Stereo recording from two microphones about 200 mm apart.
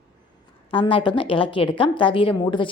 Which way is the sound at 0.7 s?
25° left (ahead or behind).